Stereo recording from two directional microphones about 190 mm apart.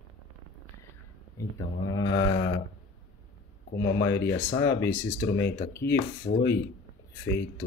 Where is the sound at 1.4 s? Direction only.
20° left (ahead or behind).